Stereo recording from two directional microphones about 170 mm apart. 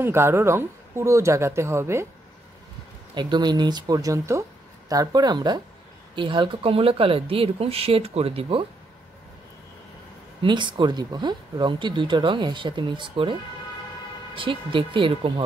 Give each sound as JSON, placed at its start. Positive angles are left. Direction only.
{"t": 0.0, "sound": "speech", "side_deg": -15}
{"t": 3.2, "sound": "speech", "side_deg": -25}
{"t": 10.4, "sound": "speech", "side_deg": -25}